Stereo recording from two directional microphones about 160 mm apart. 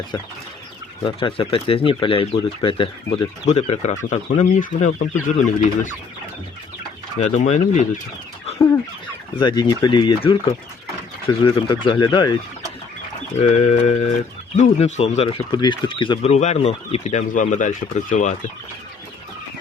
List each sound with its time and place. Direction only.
1.0 s speech: 30° left (ahead or behind)
3.4 s speech: 45° left (ahead or behind)
7.2 s speech: 45° left (ahead or behind)
8.5 s fowl: 20° left (ahead or behind)
9.3 s speech: 30° left (ahead or behind)
13.4 s speech: 40° left (ahead or behind)